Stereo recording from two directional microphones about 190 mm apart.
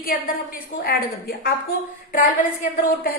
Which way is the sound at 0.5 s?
50° left (ahead or behind).